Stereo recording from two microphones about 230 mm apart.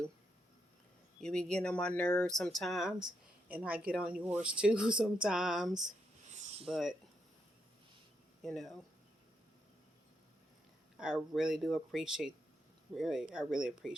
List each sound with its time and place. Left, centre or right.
1.2 s speech: centre
6.3 s a sound: right
6.7 s speech: centre
8.4 s speech: centre
10.9 s speech: centre